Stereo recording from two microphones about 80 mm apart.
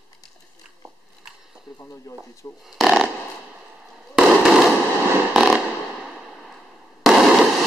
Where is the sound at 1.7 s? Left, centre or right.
Left.